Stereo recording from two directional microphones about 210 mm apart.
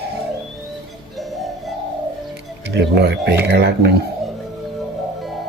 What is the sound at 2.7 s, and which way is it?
Speech, 55° right (ahead or behind).